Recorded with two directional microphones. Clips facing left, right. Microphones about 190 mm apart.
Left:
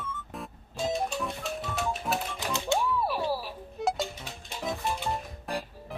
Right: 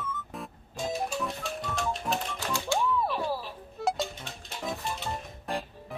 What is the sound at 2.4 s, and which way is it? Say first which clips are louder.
Music: left 2 dB; 20° left (ahead or behind).